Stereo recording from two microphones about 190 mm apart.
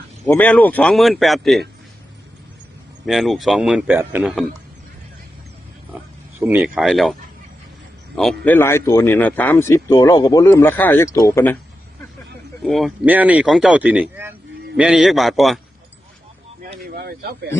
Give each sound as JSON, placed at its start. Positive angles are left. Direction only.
{"t": 0.3, "sound": "speech", "side_deg": 10}
{"t": 3.1, "sound": "speech", "side_deg": 0}
{"t": 6.4, "sound": "speech", "side_deg": -10}
{"t": 12.6, "sound": "speech", "side_deg": 0}
{"t": 16.8, "sound": "speech", "side_deg": -50}